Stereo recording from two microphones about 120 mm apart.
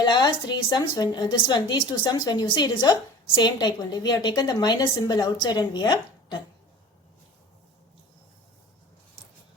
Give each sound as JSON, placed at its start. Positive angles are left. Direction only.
{"t": 0.0, "sound": "a woman's voice", "side_deg": 40}